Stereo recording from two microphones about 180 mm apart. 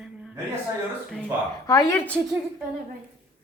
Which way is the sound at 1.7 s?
20° left (ahead or behind).